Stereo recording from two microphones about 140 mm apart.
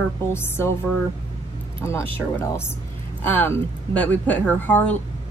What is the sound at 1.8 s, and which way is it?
Speech, 20° left (ahead or behind).